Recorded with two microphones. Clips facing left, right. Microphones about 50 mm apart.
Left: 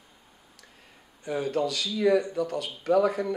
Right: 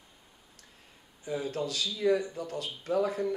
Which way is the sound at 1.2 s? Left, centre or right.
Left.